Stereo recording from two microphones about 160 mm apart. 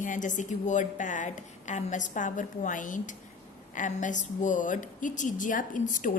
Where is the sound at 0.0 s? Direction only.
55° left (ahead or behind).